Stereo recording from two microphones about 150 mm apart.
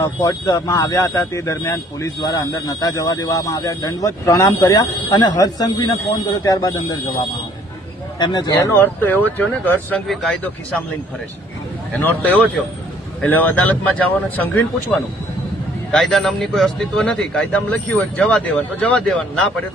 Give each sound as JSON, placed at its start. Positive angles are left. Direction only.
{"t": 0.0, "sound": "speech", "side_deg": 25}
{"t": 8.2, "sound": "a man's voice", "side_deg": 25}
{"t": 11.9, "sound": "speech", "side_deg": 10}
{"t": 15.9, "sound": "a man's voice", "side_deg": 0}